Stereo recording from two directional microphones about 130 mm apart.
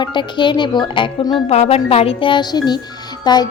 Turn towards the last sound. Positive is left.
turn(degrees=30)  # may be behind; listen again after turning